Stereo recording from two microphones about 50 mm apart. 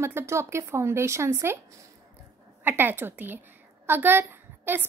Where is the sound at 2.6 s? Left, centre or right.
Right.